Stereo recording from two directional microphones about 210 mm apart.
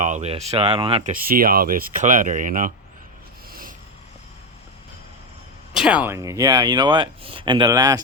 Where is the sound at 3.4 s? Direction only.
40° right (ahead or behind).